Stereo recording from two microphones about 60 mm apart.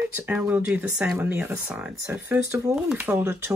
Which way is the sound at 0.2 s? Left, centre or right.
Right.